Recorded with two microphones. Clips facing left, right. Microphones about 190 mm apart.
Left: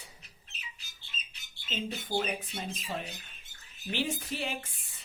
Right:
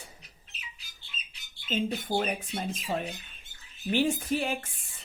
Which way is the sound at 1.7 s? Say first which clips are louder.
Right 5 dB; 50° right (ahead or behind).